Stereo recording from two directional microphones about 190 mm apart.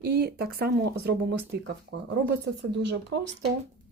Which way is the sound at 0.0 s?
55° right (ahead or behind).